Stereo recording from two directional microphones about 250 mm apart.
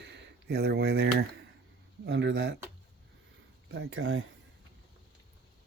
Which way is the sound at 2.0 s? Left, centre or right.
Right.